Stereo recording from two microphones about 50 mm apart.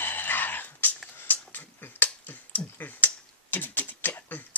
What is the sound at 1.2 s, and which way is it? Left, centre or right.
Finger snapping, left.